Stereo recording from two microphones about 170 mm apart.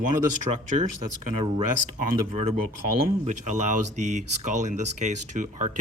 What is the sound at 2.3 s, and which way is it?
Speech, 40° right (ahead or behind).